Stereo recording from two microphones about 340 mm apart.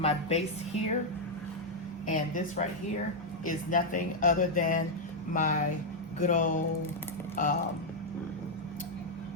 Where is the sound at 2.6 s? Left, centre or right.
Left.